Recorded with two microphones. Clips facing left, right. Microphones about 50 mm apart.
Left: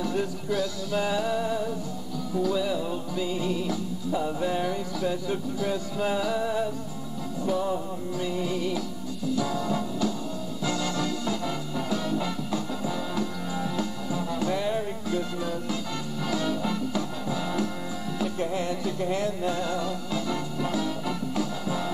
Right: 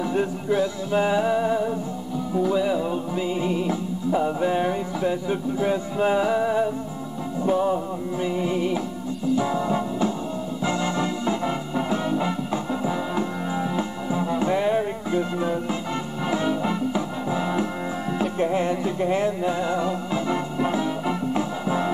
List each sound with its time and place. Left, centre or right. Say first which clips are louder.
0.0 s music: right 4 dB; right